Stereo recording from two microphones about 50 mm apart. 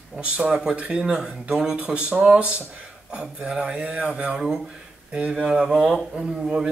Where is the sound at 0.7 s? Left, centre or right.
Right.